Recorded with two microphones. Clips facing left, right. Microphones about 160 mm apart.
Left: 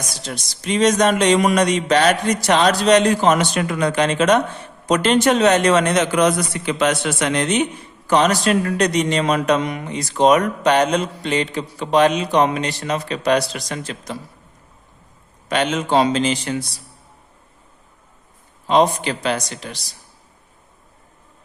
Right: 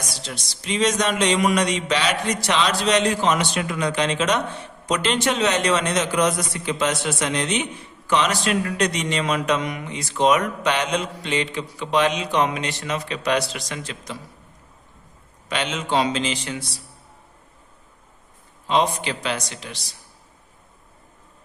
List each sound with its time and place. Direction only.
0.3 s a man's voice: 50° left (ahead or behind)
15.4 s a man's voice: 50° left (ahead or behind)
18.7 s a man's voice: 45° left (ahead or behind)